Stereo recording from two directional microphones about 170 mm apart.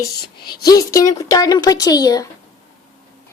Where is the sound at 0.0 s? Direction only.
25° left (ahead or behind).